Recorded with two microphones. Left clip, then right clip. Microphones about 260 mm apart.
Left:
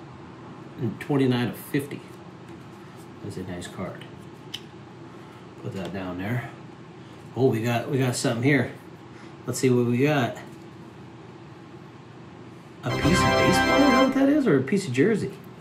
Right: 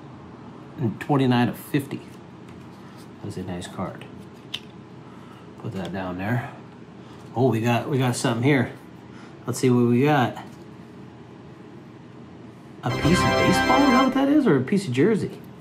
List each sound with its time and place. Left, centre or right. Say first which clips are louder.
0.9 s speech: right 3 dB; right
3.8 s speech: right 4 dB; centre
5.9 s speech: right 5 dB; centre
7.3 s speech: right 2 dB; right
12.8 s organ: right 1 dB; centre
14.1 s speech: right 1 dB; centre